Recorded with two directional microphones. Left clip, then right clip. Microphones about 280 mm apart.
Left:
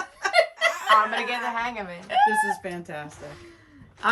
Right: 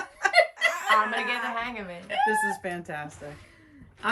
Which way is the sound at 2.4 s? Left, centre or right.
Centre.